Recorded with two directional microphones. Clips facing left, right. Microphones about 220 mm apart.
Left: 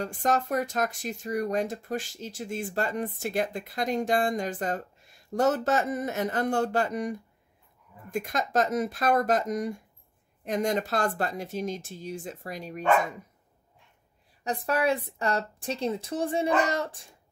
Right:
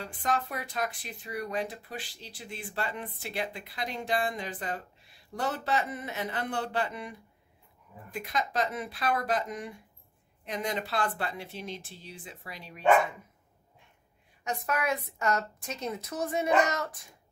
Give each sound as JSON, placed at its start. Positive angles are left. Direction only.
{"t": 0.0, "sound": "speech", "side_deg": 45}
{"t": 14.4, "sound": "a woman's voice", "side_deg": 35}